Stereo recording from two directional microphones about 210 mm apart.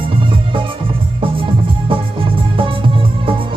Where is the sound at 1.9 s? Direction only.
25° right (ahead or behind).